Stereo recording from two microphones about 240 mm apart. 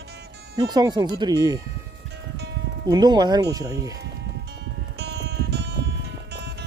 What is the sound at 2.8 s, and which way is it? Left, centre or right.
Speech, centre.